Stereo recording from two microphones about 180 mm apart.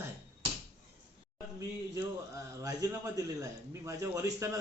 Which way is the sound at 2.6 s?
20° right (ahead or behind).